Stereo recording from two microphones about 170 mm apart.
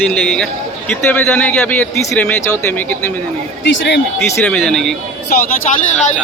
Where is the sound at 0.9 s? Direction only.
10° left (ahead or behind).